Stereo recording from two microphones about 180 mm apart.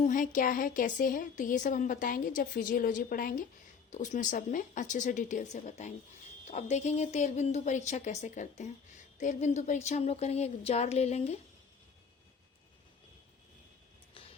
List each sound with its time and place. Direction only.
0.0 s a woman's voice: 45° left (ahead or behind)